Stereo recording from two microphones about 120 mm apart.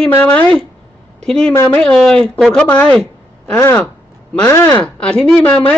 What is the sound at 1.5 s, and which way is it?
Speech, 20° left (ahead or behind).